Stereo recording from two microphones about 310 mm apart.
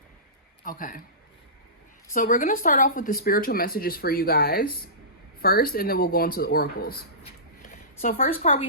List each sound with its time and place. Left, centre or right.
0.6 s a man's voice: left
2.1 s speech: left
8.0 s speech: left